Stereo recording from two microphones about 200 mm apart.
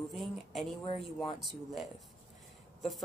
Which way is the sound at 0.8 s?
25° left (ahead or behind).